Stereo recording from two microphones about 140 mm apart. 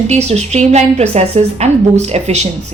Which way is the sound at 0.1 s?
50° right (ahead or behind).